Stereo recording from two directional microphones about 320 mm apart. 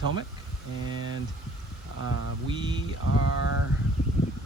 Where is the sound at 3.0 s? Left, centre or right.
Left.